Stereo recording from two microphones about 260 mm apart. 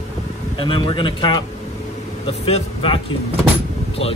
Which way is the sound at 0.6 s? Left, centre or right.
Centre.